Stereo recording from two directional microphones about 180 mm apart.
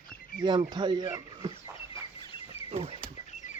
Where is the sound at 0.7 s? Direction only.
25° right (ahead or behind).